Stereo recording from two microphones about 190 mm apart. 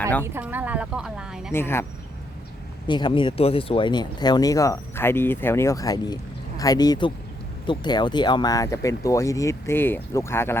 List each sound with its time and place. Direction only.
0.3 s a woman's voice: 10° right (ahead or behind)
1.5 s speech: 10° left (ahead or behind)
2.8 s speech: 25° left (ahead or behind)